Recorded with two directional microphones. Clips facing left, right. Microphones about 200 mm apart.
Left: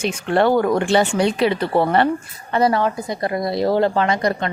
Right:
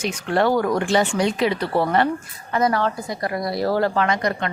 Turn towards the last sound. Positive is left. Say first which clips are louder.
# left 2 dB
turn(degrees=30)  # may be behind; listen again after turning